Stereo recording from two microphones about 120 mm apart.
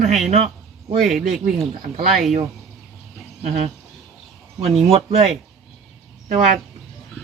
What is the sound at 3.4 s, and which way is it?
Speech, 70° right (ahead or behind).